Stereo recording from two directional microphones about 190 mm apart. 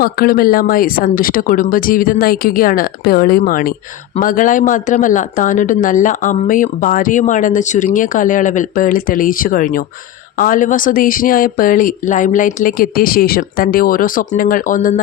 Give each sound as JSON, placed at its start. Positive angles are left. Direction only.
{"t": 0.0, "sound": "speech", "side_deg": 50}